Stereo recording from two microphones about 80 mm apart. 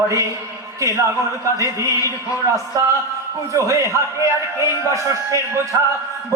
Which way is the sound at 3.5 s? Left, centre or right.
Right.